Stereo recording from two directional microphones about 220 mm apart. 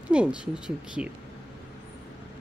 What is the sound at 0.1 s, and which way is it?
Speech, 5° right (ahead or behind).